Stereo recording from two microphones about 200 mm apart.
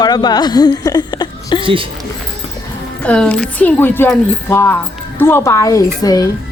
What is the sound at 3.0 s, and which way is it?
Speech, 5° left (ahead or behind).